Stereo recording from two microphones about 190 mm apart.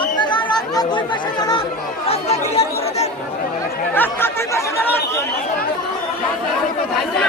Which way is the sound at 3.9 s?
10° left (ahead or behind).